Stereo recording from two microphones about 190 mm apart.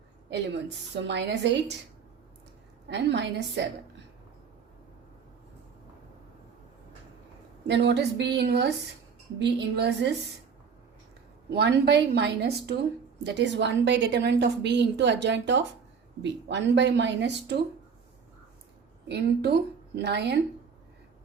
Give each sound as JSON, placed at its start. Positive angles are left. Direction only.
{"t": 0.3, "sound": "a woman's voice", "side_deg": -70}
{"t": 2.9, "sound": "a woman's voice", "side_deg": -65}
{"t": 7.7, "sound": "a woman's voice", "side_deg": -65}
{"t": 11.5, "sound": "a woman's voice", "side_deg": -65}
{"t": 19.0, "sound": "a woman's voice", "side_deg": -60}